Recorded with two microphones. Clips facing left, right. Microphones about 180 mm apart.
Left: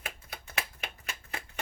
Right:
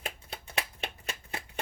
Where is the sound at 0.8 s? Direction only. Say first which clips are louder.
Right 4 dB; 30° right (ahead or behind).